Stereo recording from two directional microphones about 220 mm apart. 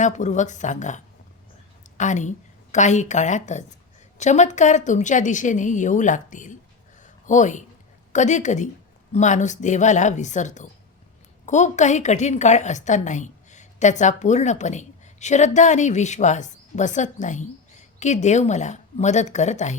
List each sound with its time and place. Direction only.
0.0 s a woman's voice: 35° left (ahead or behind)
7.0 s a sound: 35° left (ahead or behind)
8.1 s a woman's voice: 35° left (ahead or behind)